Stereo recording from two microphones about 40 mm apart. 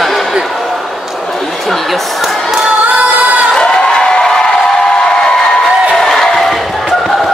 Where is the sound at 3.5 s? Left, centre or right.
Centre.